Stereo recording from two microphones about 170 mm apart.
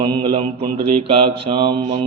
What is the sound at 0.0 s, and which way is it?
A man's voice, 30° right (ahead or behind).